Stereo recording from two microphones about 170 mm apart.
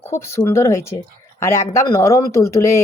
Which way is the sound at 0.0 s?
15° left (ahead or behind).